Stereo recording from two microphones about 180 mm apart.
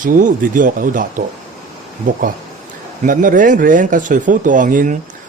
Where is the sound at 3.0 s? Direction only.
50° right (ahead or behind).